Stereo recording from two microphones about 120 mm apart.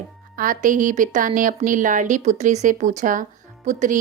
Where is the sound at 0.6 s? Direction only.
90° right.